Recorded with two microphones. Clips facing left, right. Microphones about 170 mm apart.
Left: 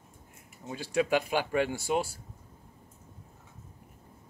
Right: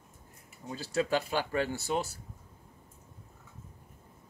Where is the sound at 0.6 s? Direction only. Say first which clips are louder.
Left 2 dB; 15° left (ahead or behind).